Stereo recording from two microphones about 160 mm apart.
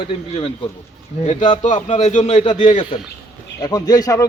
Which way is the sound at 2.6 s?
30° left (ahead or behind).